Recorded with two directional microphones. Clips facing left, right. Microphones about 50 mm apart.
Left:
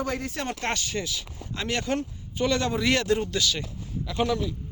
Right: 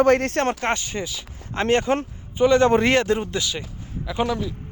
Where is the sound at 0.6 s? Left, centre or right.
Right.